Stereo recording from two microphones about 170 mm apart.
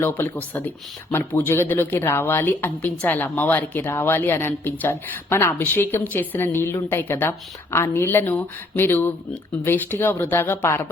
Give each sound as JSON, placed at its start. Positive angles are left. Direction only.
{"t": 0.0, "sound": "speech", "side_deg": 10}